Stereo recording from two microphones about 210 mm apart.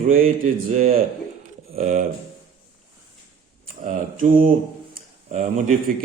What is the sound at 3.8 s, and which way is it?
Speech, 40° right (ahead or behind).